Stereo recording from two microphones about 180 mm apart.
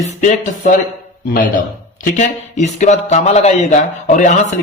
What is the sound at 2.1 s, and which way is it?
A man's voice, 40° left (ahead or behind).